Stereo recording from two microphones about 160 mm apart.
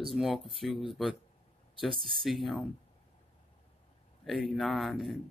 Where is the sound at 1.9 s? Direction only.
35° right (ahead or behind).